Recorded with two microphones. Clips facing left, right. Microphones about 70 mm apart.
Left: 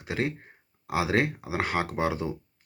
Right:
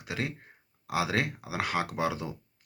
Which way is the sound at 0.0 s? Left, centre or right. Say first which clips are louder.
Left 5 dB; left.